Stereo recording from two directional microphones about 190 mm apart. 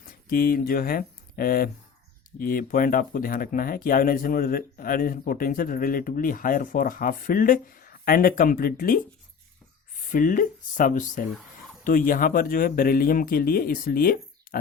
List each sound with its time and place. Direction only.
0.3 s speech: 50° left (ahead or behind)
10.1 s speech: 45° left (ahead or behind)